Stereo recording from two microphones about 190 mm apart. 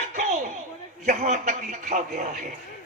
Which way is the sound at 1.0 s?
40° right (ahead or behind).